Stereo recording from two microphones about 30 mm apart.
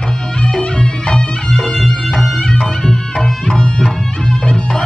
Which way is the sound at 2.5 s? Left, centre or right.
Left.